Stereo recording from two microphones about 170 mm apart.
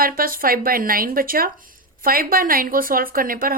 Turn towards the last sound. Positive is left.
turn(degrees=-55)  # may be behind; listen again after turning